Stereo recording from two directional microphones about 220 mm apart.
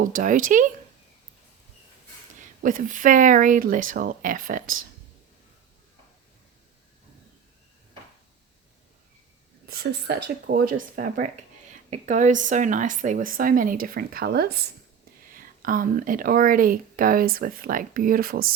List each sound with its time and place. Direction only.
0.0 s speech: 35° right (ahead or behind)
2.6 s speech: 35° right (ahead or behind)
9.6 s speech: 45° right (ahead or behind)